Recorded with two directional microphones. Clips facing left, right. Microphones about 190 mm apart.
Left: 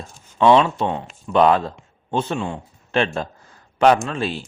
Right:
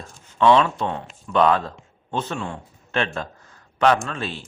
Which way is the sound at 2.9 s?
30° left (ahead or behind).